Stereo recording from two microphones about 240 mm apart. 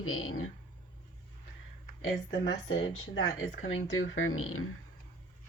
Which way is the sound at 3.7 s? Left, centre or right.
Left.